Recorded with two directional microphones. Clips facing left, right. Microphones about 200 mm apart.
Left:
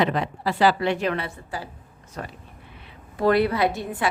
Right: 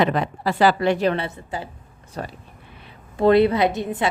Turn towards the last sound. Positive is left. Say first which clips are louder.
# right 3 dB
turn(degrees=-20)  # may be behind; listen again after turning